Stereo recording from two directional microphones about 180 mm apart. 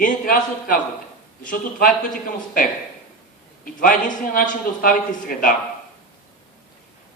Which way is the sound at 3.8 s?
50° left (ahead or behind).